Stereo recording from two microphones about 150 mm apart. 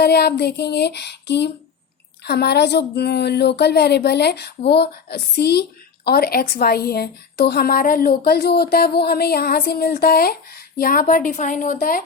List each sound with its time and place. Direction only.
0.0 s a woman's voice: 90° left
10.8 s speech: 75° left (ahead or behind)